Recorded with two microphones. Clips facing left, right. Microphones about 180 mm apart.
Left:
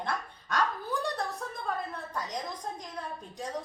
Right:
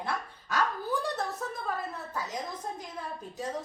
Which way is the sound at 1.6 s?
5° right (ahead or behind).